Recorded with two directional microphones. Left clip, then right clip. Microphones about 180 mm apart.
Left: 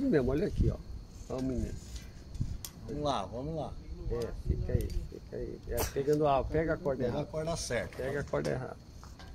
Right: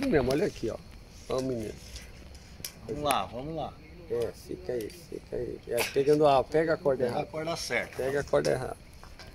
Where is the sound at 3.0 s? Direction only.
15° left (ahead or behind).